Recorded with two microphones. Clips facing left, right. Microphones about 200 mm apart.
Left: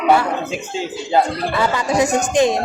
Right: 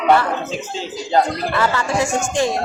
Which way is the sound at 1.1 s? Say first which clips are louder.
Even; 15° left (ahead or behind).